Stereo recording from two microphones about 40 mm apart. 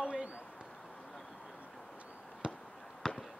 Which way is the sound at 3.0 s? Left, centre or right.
Centre.